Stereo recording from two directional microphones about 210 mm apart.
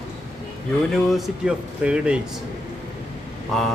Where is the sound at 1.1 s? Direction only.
5° right (ahead or behind).